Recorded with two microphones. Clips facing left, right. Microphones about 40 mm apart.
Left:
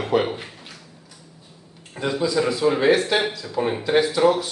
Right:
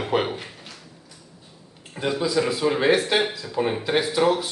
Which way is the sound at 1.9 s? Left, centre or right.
Centre.